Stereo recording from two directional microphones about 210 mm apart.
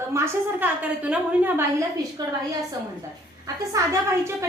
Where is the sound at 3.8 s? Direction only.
15° right (ahead or behind).